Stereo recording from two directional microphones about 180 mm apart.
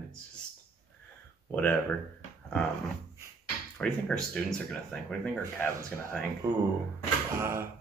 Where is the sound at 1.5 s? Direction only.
10° left (ahead or behind).